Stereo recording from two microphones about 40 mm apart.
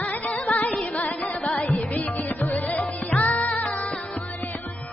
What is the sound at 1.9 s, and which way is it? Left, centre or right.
Music, left.